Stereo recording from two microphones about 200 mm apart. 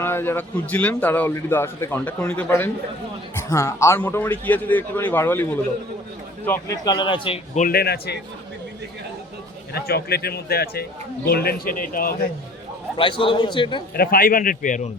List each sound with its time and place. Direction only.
0.0 s a man's voice: 10° left (ahead or behind)
7.5 s a man's voice: 45° left (ahead or behind)
9.7 s a man's voice: 50° left (ahead or behind)
13.0 s speech: 25° left (ahead or behind)
13.9 s a man's voice: 50° left (ahead or behind)